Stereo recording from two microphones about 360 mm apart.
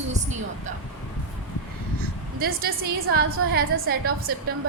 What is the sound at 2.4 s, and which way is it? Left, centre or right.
Speech, right.